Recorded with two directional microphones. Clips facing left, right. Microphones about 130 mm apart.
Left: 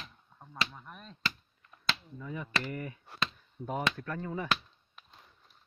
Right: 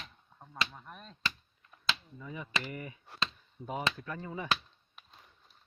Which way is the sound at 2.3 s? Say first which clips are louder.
Left 2 dB; 15° right (ahead or behind).